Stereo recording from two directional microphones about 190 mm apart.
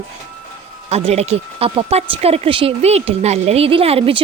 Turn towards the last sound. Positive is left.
turn(degrees=-30)  # may be behind; listen again after turning